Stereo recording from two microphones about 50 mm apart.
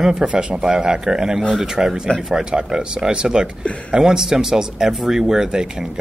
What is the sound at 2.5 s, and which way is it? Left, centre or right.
Speech, centre.